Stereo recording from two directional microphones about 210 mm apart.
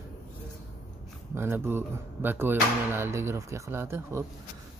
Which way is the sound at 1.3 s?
10° right (ahead or behind).